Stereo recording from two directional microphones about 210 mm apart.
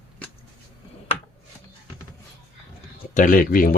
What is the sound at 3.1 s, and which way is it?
Speech, 40° left (ahead or behind).